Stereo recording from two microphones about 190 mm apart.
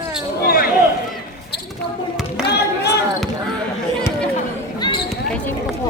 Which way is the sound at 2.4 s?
60° left (ahead or behind).